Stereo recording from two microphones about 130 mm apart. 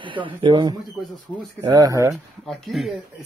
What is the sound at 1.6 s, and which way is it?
Speech, 25° right (ahead or behind).